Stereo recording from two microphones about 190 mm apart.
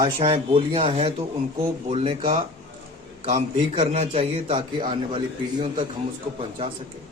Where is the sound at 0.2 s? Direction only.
30° right (ahead or behind).